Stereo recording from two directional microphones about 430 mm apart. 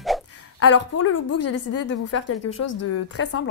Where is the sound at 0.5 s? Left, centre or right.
Left.